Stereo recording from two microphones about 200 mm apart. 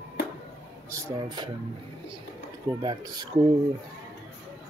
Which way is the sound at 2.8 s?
20° right (ahead or behind).